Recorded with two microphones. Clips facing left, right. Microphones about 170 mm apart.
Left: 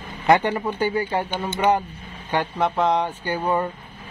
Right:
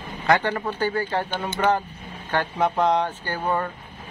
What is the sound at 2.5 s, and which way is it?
A man's voice, centre (ahead or behind).